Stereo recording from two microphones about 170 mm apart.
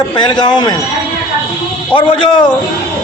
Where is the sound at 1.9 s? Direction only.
30° left (ahead or behind).